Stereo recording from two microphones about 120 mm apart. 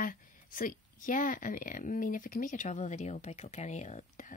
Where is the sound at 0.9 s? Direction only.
90° left.